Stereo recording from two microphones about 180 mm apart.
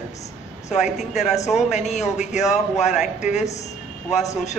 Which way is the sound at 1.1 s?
40° left (ahead or behind).